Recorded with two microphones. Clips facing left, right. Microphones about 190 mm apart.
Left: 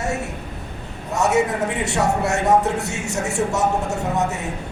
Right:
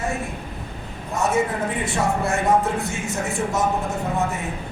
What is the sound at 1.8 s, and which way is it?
Speech, 70° left (ahead or behind).